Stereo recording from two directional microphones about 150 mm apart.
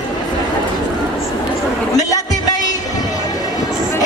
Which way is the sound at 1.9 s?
25° left (ahead or behind).